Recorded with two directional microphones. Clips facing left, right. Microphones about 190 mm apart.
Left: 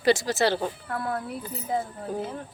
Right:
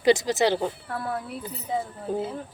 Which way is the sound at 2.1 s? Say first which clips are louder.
Right 4 dB; 25° right (ahead or behind).